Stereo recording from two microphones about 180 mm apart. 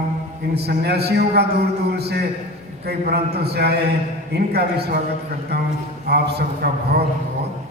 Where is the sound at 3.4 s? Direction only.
65° right (ahead or behind).